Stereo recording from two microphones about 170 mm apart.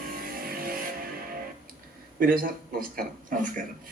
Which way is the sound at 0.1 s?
60° right (ahead or behind).